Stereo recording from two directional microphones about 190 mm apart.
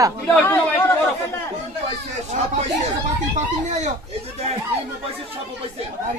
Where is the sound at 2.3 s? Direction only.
40° right (ahead or behind).